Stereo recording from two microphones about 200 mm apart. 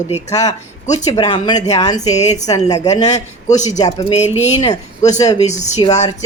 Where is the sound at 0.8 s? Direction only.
35° left (ahead or behind).